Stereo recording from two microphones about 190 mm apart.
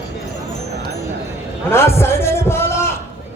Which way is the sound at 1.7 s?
15° left (ahead or behind).